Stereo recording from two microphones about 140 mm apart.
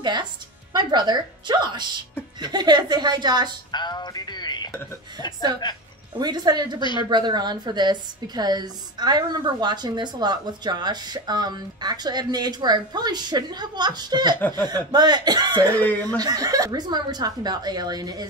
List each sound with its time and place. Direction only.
0.0 s a woman's voice: 30° right (ahead or behind)
3.7 s speech: 30° left (ahead or behind)
6.1 s a woman's voice: 30° right (ahead or behind)
6.8 s a woman's voice: 35° left (ahead or behind)
7.1 s a woman's voice: 30° right (ahead or behind)
15.8 s speech: 10° left (ahead or behind)
16.2 s a woman's voice: 25° right (ahead or behind)